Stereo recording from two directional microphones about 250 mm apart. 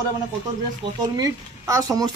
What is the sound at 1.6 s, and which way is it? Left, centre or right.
Speech, centre.